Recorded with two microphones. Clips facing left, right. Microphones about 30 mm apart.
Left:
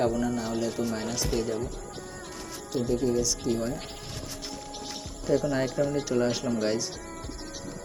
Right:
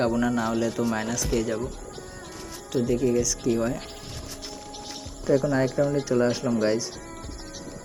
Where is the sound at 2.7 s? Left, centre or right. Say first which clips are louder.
Right 4 dB; centre.